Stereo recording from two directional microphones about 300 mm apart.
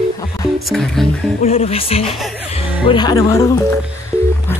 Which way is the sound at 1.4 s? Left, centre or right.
Centre.